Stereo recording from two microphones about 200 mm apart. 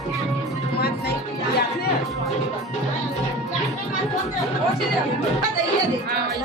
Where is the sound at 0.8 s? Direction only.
55° left (ahead or behind).